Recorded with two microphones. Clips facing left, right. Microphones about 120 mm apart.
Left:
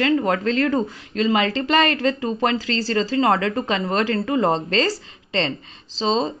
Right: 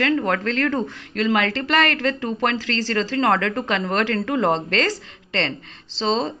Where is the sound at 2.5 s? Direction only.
70° right (ahead or behind).